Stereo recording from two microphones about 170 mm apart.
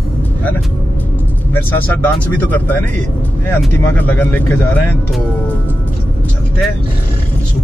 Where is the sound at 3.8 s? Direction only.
10° left (ahead or behind).